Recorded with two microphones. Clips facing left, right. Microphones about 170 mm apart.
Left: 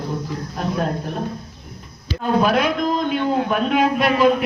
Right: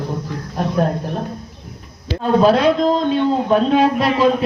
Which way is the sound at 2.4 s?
30° right (ahead or behind).